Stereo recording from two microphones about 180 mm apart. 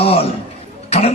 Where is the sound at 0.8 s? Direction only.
35° left (ahead or behind).